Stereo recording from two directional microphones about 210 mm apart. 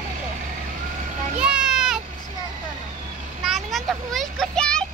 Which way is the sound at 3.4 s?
Centre (ahead or behind).